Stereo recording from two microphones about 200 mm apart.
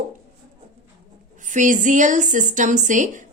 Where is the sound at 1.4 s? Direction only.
40° right (ahead or behind).